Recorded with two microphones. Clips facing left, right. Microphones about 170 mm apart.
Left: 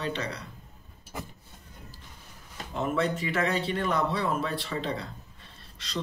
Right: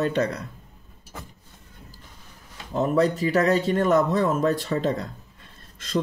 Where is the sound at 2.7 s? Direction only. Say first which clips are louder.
Right 7 dB; 40° right (ahead or behind).